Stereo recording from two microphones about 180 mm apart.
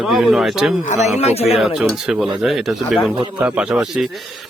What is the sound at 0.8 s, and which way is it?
Speech, 40° left (ahead or behind).